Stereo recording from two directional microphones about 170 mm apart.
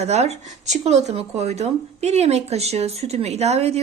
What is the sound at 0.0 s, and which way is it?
Speech, 40° right (ahead or behind).